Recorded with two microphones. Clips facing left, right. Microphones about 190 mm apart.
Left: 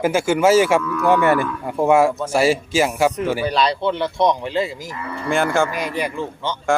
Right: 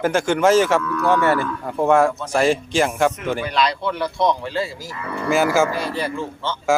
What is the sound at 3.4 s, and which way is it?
A man's voice, 35° left (ahead or behind).